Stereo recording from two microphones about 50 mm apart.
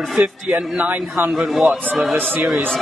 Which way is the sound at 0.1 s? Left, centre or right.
Centre.